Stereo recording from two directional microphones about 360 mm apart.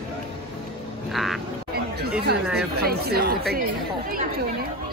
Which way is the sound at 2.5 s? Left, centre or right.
Right.